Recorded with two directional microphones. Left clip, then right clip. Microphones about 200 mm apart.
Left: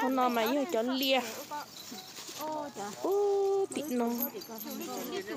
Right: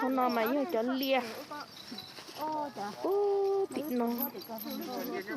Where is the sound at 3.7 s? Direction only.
10° left (ahead or behind).